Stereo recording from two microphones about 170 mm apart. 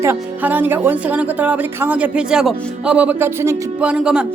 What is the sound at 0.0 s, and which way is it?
Speech, 10° right (ahead or behind).